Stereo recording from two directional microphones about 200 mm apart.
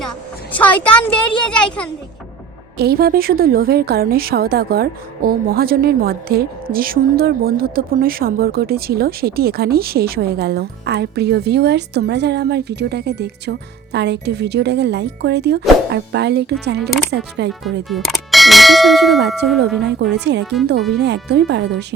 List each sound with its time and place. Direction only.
0.6 s a woman's voice: 10° left (ahead or behind)
2.7 s a woman's voice: 50° right (ahead or behind)
17.8 s clang: centre (ahead or behind)
19.8 s speech: 60° right (ahead or behind)
20.4 s a child's voice: centre (ahead or behind)
20.9 s speech: 55° right (ahead or behind)